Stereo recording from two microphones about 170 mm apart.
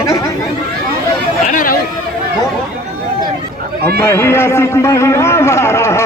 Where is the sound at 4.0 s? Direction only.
15° left (ahead or behind).